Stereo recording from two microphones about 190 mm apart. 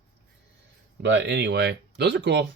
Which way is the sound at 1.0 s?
65° right (ahead or behind).